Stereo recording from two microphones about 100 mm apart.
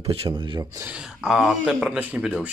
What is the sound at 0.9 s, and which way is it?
Speech, 5° right (ahead or behind).